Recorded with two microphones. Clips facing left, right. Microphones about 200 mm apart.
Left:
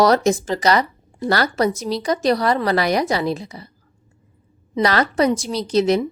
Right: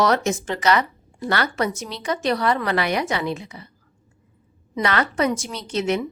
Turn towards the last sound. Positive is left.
turn(degrees=35)  # may be behind; listen again after turning